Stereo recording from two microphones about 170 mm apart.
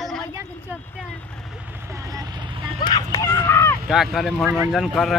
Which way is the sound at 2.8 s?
20° left (ahead or behind).